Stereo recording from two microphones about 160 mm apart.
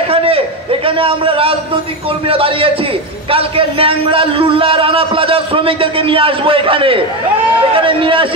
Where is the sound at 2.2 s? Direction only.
35° right (ahead or behind).